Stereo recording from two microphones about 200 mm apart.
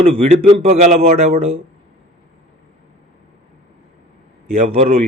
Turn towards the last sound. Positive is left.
turn(degrees=-30)  # may be behind; listen again after turning